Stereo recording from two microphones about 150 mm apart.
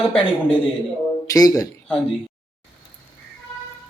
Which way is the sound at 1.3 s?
20° left (ahead or behind).